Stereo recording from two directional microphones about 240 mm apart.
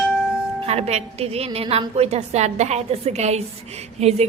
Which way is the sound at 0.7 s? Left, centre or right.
Right.